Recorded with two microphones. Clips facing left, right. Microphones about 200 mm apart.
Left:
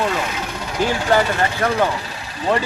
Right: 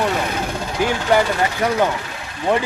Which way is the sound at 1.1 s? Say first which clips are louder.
Right 1 dB; 15° right (ahead or behind).